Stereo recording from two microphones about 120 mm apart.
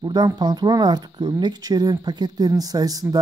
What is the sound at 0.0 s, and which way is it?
Speech, 35° right (ahead or behind).